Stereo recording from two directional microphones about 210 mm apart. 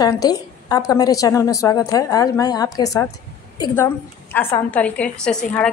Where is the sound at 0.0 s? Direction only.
20° left (ahead or behind).